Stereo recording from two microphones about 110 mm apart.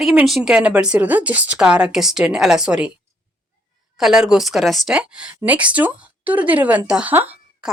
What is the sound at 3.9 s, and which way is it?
A woman's voice, 5° right (ahead or behind).